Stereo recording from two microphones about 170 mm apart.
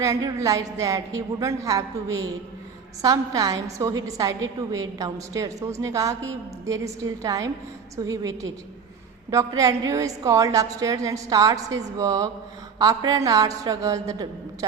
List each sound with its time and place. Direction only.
0.0 s a woman's voice: 20° right (ahead or behind)